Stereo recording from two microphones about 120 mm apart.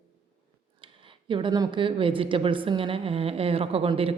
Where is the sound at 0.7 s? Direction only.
45° right (ahead or behind).